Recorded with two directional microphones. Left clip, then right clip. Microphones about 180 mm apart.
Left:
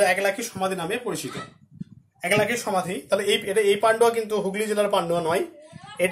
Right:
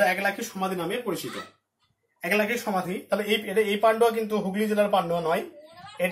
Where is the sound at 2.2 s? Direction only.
55° left (ahead or behind).